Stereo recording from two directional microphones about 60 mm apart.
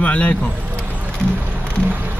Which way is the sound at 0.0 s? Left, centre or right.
Left.